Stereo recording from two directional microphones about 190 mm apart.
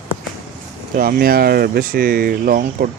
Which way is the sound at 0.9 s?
50° right (ahead or behind).